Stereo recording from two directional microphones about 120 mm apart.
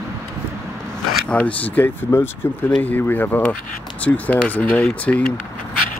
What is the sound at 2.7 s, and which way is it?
Speech, 15° left (ahead or behind).